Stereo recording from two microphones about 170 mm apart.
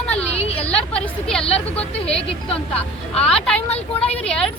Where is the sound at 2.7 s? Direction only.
5° left (ahead or behind).